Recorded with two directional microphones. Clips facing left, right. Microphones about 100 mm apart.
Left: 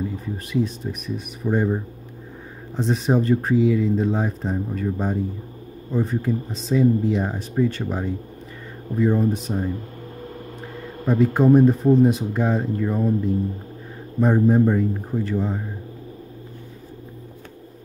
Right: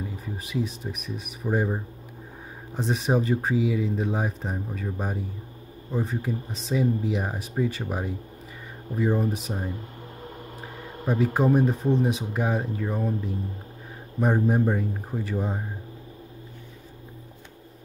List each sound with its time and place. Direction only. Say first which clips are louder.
0.2 s speech: left 4 dB; centre (ahead or behind)
11.1 s speech: left 6 dB; 5° right (ahead or behind)
15.3 s speech: left 2 dB; 15° right (ahead or behind)